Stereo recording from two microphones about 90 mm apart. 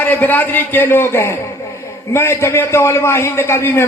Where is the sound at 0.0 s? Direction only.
20° left (ahead or behind).